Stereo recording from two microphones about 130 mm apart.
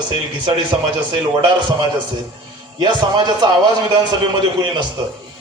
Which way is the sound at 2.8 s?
35° right (ahead or behind).